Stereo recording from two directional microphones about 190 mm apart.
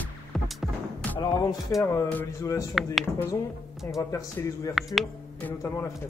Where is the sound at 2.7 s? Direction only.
Centre (ahead or behind).